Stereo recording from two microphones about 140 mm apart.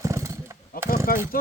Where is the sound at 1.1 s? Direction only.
90° left.